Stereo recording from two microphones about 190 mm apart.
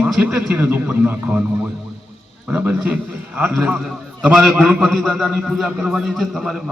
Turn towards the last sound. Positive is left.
turn(degrees=0)  # may be behind; listen again after turning